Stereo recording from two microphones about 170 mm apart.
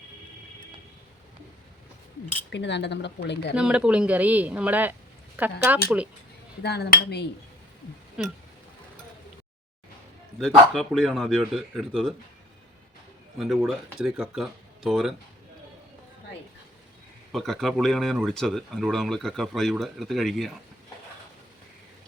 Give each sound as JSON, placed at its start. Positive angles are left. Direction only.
{"t": 2.5, "sound": "speech", "side_deg": 90}
{"t": 3.5, "sound": "speech", "side_deg": -5}
{"t": 6.6, "sound": "speech", "side_deg": 75}
{"t": 8.2, "sound": "speech", "side_deg": -5}
{"t": 10.4, "sound": "speech", "side_deg": 0}
{"t": 13.4, "sound": "speech", "side_deg": 0}
{"t": 17.3, "sound": "speech", "side_deg": 0}